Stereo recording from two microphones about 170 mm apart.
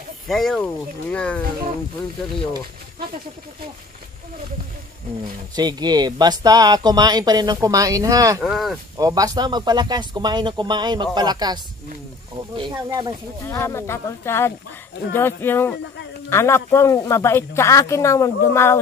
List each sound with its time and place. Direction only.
0.3 s speech: centre (ahead or behind)
5.2 s speech: 25° right (ahead or behind)
8.4 s speech: centre (ahead or behind)
8.9 s speech: 20° right (ahead or behind)
13.5 s speech: 15° left (ahead or behind)